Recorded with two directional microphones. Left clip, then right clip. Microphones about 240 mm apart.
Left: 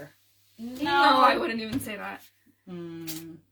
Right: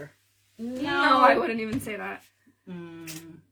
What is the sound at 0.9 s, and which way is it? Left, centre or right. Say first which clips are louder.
Speech: even; centre.